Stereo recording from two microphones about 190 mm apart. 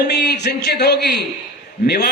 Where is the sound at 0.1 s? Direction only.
60° left (ahead or behind).